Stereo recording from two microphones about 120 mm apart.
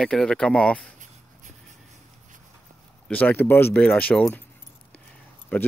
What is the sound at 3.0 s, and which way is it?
Speech, 10° left (ahead or behind).